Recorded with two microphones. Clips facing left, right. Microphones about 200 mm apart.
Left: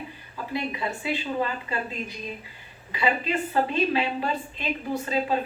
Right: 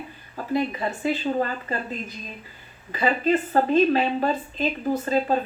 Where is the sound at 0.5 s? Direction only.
45° right (ahead or behind).